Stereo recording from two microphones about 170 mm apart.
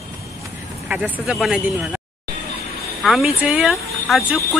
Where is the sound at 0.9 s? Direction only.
5° right (ahead or behind).